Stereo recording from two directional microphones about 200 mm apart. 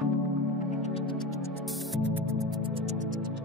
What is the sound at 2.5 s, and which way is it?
Music, 25° right (ahead or behind).